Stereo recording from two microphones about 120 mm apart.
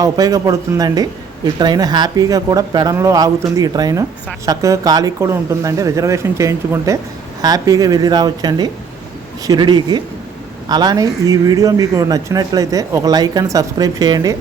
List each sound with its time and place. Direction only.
0.0 s speech: 30° right (ahead or behind)